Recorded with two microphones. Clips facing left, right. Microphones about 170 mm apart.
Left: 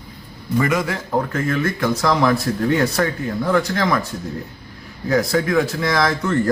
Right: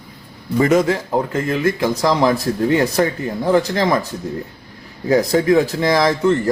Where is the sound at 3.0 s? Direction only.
25° right (ahead or behind).